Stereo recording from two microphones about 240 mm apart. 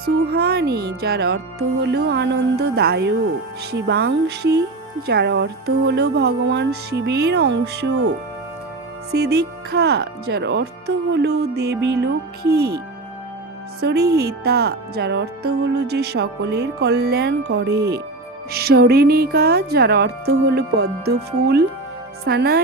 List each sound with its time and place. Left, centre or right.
0.0 s speech: right
9.1 s speech: right
13.8 s speech: right